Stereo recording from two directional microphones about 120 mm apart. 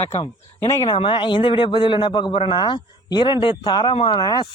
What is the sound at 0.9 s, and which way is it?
A man's voice, 45° left (ahead or behind).